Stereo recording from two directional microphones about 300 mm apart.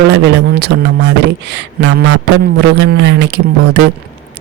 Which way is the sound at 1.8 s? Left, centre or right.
Right.